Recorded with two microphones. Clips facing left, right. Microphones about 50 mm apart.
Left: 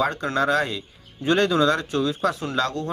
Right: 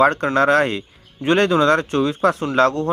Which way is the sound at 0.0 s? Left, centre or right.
Right.